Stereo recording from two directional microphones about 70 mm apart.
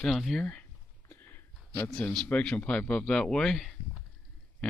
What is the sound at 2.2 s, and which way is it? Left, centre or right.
Speech, centre.